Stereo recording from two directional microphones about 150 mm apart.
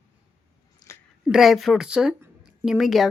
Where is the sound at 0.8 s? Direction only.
25° left (ahead or behind).